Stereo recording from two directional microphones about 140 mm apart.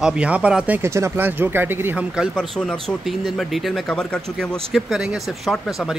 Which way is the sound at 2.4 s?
5° left (ahead or behind).